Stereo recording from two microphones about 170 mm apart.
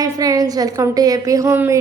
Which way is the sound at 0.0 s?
20° right (ahead or behind).